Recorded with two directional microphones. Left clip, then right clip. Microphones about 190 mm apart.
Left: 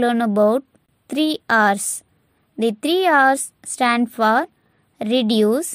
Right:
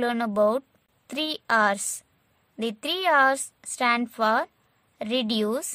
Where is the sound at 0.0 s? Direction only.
25° left (ahead or behind).